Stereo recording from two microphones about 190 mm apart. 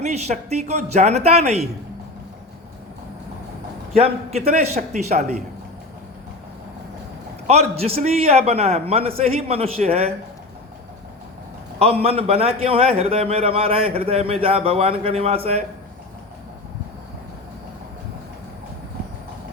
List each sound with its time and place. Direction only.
0.0 s a man's voice: 35° right (ahead or behind)
3.9 s a man's voice: 35° right (ahead or behind)
7.4 s a man's voice: 35° right (ahead or behind)
11.8 s a man's voice: 30° right (ahead or behind)